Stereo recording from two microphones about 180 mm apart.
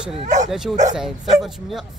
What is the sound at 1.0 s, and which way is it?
Speech, centre (ahead or behind).